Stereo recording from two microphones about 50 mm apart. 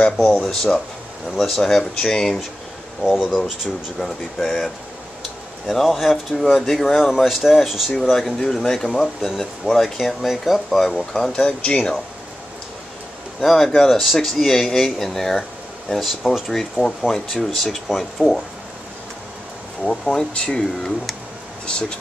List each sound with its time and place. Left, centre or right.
0.3 s speech: centre
3.1 s speech: centre
4.0 s speech: centre
5.7 s speech: centre
7.2 s speech: centre
8.0 s speech: centre
13.4 s speech: centre
19.8 s speech: centre